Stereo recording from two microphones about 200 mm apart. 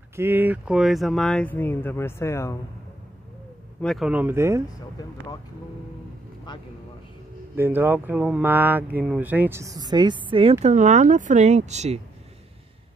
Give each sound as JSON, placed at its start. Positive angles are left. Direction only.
{"t": 0.1, "sound": "speech", "side_deg": -10}
{"t": 3.8, "sound": "speech", "side_deg": 0}
{"t": 7.5, "sound": "speech", "side_deg": -10}
{"t": 10.6, "sound": "speech", "side_deg": -35}